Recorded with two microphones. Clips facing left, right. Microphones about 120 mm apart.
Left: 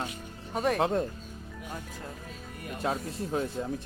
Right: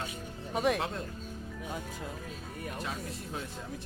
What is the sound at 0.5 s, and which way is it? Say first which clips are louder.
Speech: left 1 dB; 5° right (ahead or behind).